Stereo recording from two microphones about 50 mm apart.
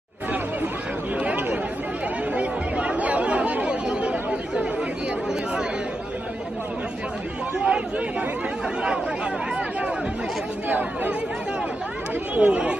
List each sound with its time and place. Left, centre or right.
2.3 s chatter: right
7.5 s chatter: right
10.7 s speech: right
12.4 s speech: right